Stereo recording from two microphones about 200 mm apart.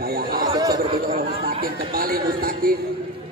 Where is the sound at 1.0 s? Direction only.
55° right (ahead or behind).